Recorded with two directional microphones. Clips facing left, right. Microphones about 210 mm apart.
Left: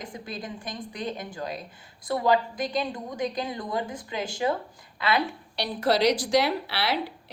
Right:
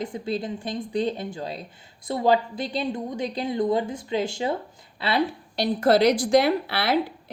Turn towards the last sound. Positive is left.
turn(degrees=-50)  # may be behind; listen again after turning